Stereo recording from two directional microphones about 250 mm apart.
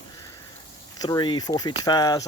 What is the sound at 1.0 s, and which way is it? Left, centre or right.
Speech, centre.